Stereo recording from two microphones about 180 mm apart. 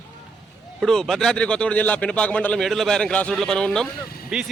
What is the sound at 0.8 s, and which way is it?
A man's voice, centre (ahead or behind).